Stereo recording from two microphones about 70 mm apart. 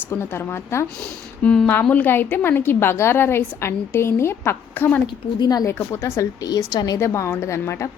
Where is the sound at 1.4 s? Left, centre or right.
Centre.